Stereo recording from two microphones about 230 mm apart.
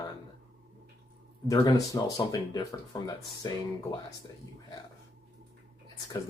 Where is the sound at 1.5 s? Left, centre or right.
Centre.